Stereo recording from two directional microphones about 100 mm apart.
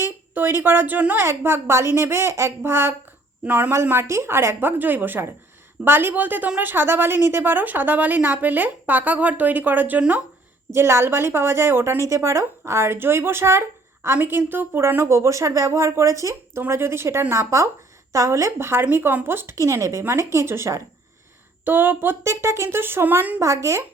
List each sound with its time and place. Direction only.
0.0 s a woman's voice: 25° right (ahead or behind)
21.6 s a woman's voice: 20° right (ahead or behind)
23.4 s speech: 30° right (ahead or behind)